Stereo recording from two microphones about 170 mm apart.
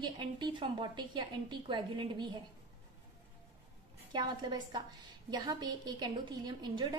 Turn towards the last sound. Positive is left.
turn(degrees=-25)  # may be behind; listen again after turning